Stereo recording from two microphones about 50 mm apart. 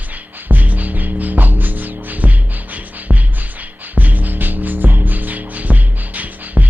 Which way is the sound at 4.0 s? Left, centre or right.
Right.